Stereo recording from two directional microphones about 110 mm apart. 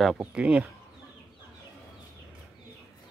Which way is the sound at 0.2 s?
10° right (ahead or behind).